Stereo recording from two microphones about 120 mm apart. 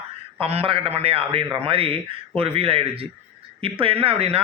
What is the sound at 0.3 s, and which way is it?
A man's voice, 55° right (ahead or behind).